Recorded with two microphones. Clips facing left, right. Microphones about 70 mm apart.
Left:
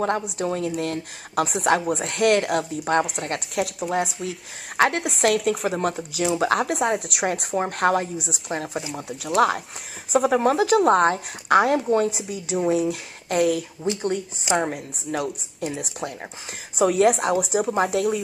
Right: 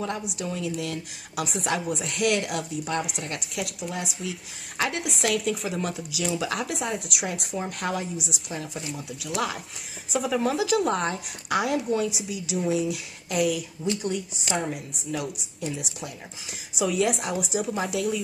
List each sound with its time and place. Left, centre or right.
0.4 s a woman's voice: left